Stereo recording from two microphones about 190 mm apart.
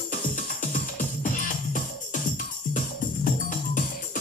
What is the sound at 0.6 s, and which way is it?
Music, 45° left (ahead or behind).